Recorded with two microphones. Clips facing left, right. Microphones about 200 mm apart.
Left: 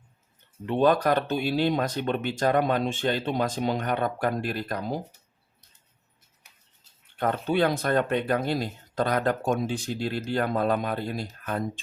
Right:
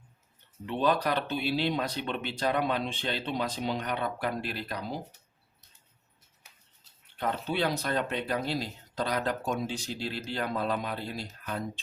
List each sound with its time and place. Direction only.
0.6 s speech: 50° left (ahead or behind)
7.2 s speech: 50° left (ahead or behind)